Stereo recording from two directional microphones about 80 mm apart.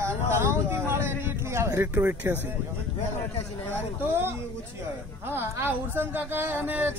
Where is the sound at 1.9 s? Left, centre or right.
Right.